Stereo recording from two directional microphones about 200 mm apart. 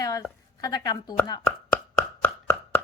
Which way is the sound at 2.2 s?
10° left (ahead or behind).